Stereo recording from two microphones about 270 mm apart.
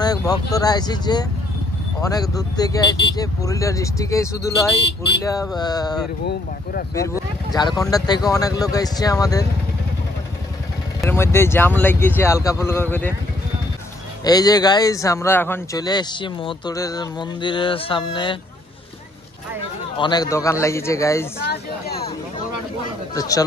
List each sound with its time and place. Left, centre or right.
0.0 s speech: centre
11.0 s speech: centre
14.2 s speech: centre
20.0 s speech: centre
21.4 s a sound: left
23.1 s speech: centre